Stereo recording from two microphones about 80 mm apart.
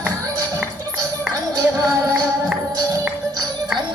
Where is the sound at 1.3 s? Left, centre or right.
Right.